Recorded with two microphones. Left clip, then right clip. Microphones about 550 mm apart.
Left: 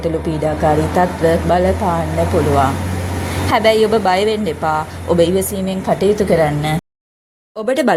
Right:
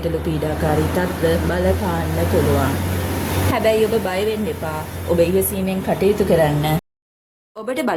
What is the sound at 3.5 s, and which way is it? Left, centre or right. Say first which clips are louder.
Speech: left 5 dB; right.